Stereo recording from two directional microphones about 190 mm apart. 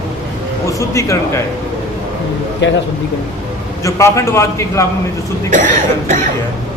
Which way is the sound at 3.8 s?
15° left (ahead or behind).